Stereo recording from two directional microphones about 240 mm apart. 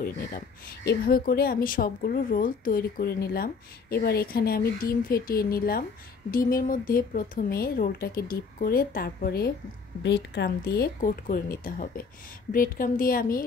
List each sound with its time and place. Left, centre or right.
0.0 s speech: left